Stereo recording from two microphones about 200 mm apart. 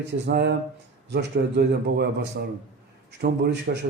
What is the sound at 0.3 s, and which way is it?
A man's voice, 55° right (ahead or behind).